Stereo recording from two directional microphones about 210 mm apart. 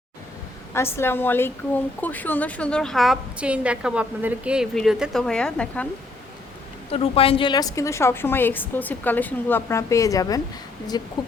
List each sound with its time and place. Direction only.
0.7 s a woman's voice: 10° left (ahead or behind)
6.9 s a woman's voice: 25° left (ahead or behind)